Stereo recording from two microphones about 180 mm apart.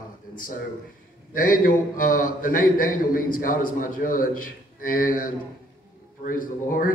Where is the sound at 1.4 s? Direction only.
50° left (ahead or behind).